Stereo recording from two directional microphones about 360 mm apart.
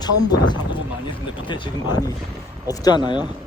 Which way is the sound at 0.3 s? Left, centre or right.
Centre.